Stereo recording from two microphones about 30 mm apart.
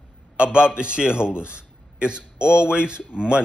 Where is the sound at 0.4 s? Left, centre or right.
Right.